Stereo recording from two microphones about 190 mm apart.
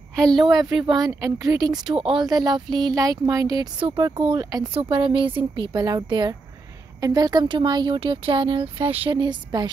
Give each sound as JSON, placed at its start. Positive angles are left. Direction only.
{"t": 0.1, "sound": "a woman's voice", "side_deg": 5}
{"t": 0.8, "sound": "speech", "side_deg": -20}